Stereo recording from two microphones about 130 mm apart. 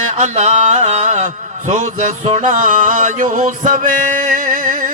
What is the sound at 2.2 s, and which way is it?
Male singing, 75° right (ahead or behind).